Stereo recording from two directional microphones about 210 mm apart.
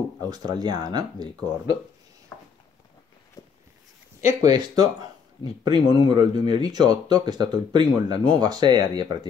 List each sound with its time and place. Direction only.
0.2 s speech: 20° right (ahead or behind)
2.3 s a sound: 5° left (ahead or behind)
4.4 s speech: 20° right (ahead or behind)